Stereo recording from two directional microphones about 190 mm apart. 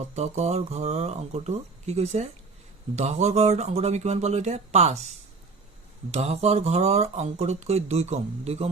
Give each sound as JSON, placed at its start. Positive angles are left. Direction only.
{"t": 0.0, "sound": "speech", "side_deg": -35}
{"t": 6.1, "sound": "speech", "side_deg": -35}